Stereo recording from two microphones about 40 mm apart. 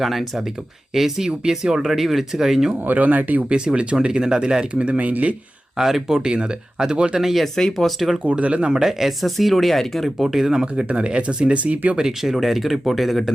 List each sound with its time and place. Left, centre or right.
0.0 s speech: centre
1.3 s speech: centre
2.8 s speech: right
3.5 s speech: right
5.7 s speech: centre
6.2 s speech: right
7.2 s speech: centre
7.4 s speech: centre
8.2 s speech: right
8.8 s speech: centre
10.2 s speech: centre
10.8 s speech: right
11.9 s speech: centre